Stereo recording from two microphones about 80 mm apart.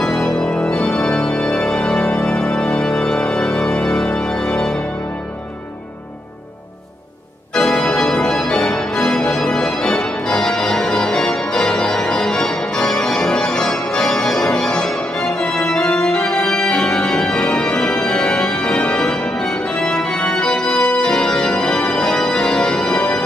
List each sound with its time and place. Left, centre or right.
0.0 s organ: centre
7.5 s organ: centre